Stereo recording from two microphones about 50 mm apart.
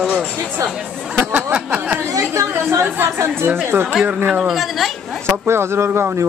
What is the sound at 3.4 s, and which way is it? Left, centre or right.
Speech, right.